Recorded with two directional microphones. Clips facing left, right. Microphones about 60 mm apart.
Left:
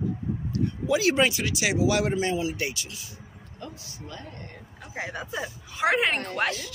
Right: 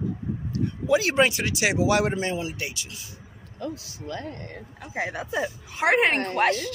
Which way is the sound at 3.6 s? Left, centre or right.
Right.